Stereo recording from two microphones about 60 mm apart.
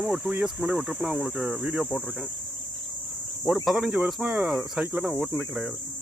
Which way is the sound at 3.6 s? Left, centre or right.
Centre.